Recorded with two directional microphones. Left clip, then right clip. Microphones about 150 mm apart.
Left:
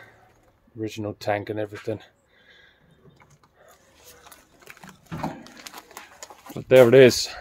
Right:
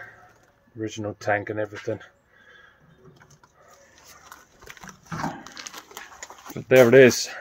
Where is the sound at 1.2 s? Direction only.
30° left (ahead or behind).